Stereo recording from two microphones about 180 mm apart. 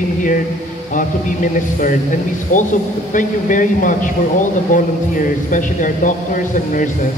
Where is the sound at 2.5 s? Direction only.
45° left (ahead or behind).